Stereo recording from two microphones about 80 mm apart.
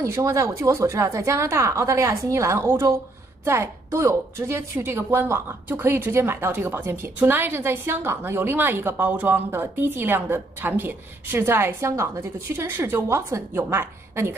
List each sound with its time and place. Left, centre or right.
0.0 s a woman's voice: right